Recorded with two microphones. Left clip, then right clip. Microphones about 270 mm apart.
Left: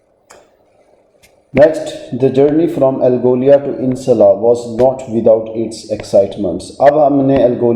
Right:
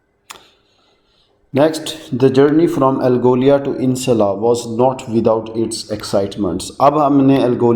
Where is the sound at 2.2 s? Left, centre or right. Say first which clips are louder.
Left 1 dB; right.